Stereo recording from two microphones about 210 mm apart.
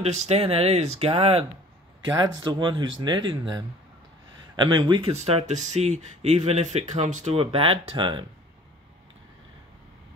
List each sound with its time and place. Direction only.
0.0 s speech: 30° right (ahead or behind)
2.4 s speech: 20° right (ahead or behind)